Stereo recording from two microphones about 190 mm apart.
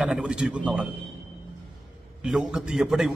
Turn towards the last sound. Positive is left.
turn(degrees=-5)  # may be behind; listen again after turning